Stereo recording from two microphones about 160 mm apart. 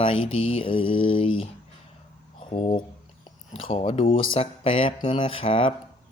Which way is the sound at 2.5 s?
35° left (ahead or behind).